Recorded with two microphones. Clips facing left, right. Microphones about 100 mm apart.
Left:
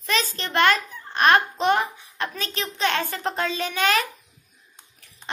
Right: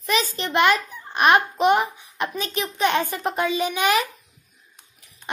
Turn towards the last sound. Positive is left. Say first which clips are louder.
# right 2 dB
turn(degrees=-15)  # may be behind; listen again after turning